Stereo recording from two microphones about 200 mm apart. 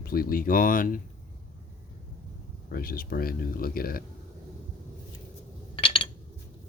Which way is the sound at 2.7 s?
50° left (ahead or behind).